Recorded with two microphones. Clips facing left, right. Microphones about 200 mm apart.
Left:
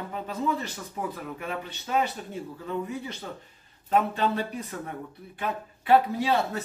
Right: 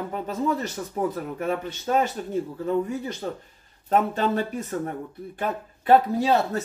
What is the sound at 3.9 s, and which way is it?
Speech, 45° right (ahead or behind).